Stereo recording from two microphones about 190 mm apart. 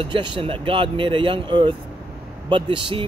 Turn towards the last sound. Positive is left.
turn(degrees=-25)  # may be behind; listen again after turning